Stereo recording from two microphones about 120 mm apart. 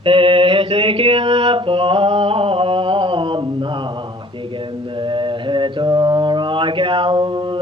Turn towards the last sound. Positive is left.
turn(degrees=-40)  # may be behind; listen again after turning